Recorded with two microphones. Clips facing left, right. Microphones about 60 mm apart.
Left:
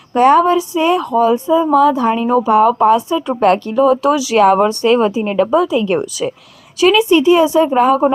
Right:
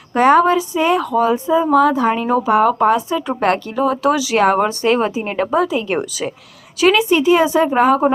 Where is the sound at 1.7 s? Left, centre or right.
Right.